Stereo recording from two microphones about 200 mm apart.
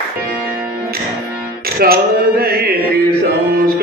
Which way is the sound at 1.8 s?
50° right (ahead or behind).